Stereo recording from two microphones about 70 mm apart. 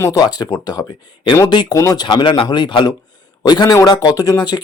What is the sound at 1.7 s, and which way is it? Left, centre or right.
Speech, left.